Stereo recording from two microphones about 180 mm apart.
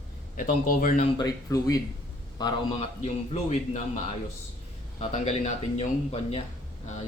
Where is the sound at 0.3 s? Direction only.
50° left (ahead or behind).